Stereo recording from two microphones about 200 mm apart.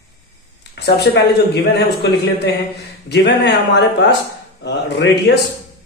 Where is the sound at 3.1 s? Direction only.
60° left (ahead or behind).